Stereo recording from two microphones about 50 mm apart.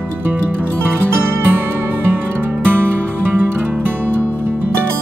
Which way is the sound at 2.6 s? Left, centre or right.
Right.